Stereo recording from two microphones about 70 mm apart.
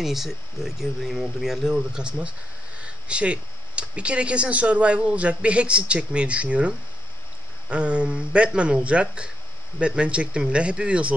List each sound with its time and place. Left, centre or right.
0.0 s speech: centre
7.7 s speech: centre